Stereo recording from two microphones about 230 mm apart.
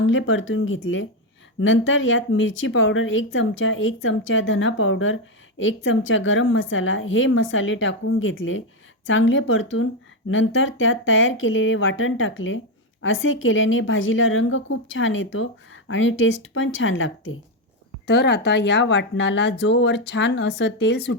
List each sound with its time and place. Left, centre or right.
0.0 s speech: left
18.0 s speech: left